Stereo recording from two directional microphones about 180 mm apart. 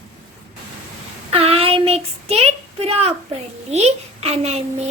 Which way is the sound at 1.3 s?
35° right (ahead or behind).